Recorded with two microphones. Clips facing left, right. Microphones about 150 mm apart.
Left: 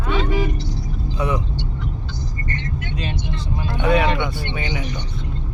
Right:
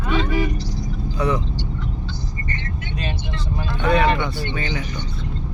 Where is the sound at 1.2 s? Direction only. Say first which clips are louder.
Right 1 dB; 20° left (ahead or behind).